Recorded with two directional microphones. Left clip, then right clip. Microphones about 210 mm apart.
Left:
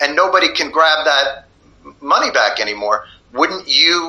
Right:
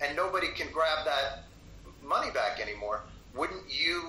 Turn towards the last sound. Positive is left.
turn(degrees=40)  # may be behind; listen again after turning